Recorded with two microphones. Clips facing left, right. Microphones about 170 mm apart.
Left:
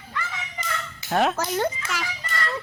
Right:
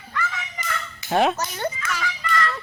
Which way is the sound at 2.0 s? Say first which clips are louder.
Right 5 dB; 35° left (ahead or behind).